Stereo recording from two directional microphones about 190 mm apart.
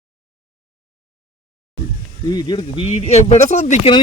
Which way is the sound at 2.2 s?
20° left (ahead or behind).